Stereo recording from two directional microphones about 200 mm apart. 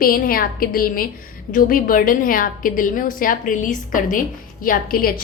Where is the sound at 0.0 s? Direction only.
45° left (ahead or behind).